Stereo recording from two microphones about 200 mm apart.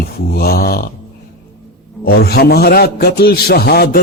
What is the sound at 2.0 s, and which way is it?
Music, 50° left (ahead or behind).